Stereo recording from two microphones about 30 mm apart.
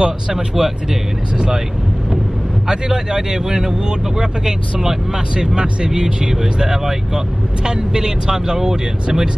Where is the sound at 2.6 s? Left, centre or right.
Right.